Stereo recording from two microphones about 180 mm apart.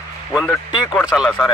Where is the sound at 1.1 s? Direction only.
Centre (ahead or behind).